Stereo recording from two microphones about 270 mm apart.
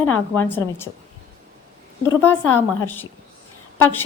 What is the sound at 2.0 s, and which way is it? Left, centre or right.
Speech, centre.